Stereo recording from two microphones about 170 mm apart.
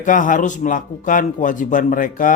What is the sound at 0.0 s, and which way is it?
A man's voice, 50° left (ahead or behind).